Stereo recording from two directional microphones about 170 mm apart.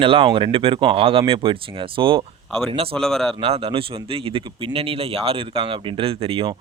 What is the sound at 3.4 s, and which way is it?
Speech, 35° right (ahead or behind).